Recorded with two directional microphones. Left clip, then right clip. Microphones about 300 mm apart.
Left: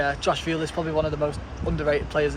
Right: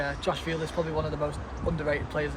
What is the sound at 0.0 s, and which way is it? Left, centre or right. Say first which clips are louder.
Speech: left 6 dB; centre.